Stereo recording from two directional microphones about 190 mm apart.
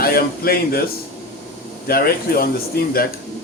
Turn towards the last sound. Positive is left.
turn(degrees=55)  # may be behind; listen again after turning